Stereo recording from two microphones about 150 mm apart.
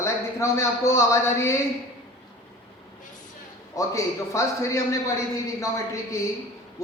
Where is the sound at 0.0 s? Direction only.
20° left (ahead or behind).